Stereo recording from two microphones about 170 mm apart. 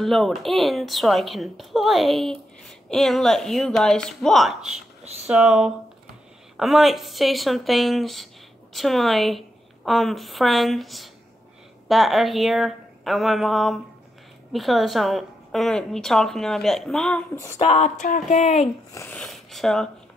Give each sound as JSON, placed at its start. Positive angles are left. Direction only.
{"t": 0.0, "sound": "a woman's voice", "side_deg": 0}
{"t": 17.6, "sound": "speech", "side_deg": 40}
{"t": 19.1, "sound": "speech", "side_deg": 0}